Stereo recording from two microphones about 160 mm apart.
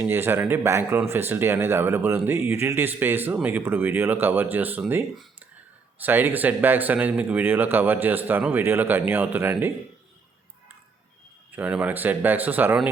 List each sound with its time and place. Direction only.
0.0 s speech: 15° right (ahead or behind)
11.5 s speech: 10° right (ahead or behind)